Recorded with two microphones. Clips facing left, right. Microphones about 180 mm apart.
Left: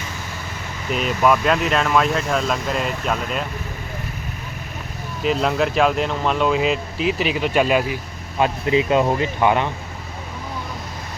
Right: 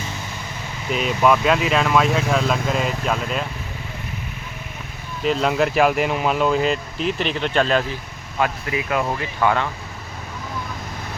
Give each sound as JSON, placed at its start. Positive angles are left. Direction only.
{"t": 0.9, "sound": "speech", "side_deg": 0}
{"t": 5.2, "sound": "speech", "side_deg": 0}
{"t": 8.4, "sound": "speech", "side_deg": 25}